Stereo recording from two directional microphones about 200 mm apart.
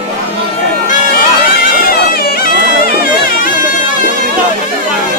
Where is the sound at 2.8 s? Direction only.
45° left (ahead or behind).